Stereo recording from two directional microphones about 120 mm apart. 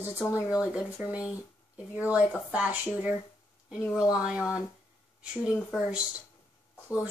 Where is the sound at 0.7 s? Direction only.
10° right (ahead or behind).